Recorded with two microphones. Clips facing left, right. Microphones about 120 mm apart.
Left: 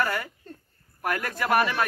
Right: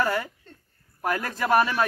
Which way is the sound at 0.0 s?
20° right (ahead or behind).